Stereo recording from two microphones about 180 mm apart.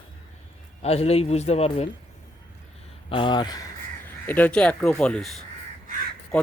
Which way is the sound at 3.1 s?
25° left (ahead or behind).